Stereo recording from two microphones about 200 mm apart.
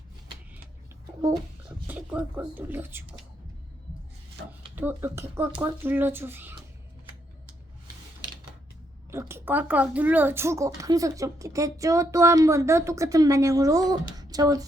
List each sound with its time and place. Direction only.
2.1 s speech: 10° right (ahead or behind)
4.7 s speech: 10° right (ahead or behind)
9.0 s speech: 10° right (ahead or behind)